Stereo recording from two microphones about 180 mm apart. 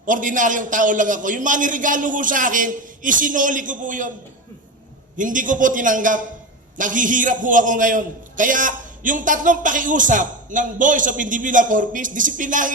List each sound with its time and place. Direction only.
0.0 s a man's voice: 45° right (ahead or behind)
5.1 s a man's voice: 45° right (ahead or behind)